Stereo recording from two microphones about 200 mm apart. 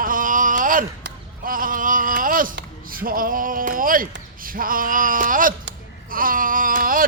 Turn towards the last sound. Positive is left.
turn(degrees=-45)  # may be behind; listen again after turning